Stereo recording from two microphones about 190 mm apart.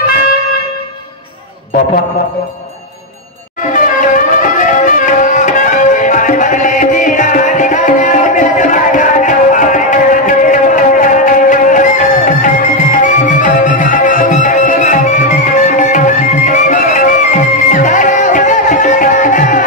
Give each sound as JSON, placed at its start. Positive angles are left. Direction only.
{"t": 3.7, "sound": "music", "side_deg": 45}